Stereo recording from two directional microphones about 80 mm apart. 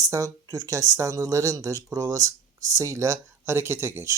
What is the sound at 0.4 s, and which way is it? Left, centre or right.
Speech, right.